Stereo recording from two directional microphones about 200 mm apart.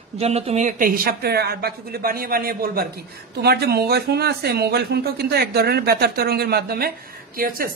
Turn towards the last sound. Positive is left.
turn(degrees=-45)  # may be behind; listen again after turning